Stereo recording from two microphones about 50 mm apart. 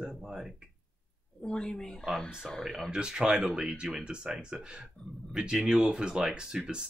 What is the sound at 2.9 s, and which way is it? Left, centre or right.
Speech, centre.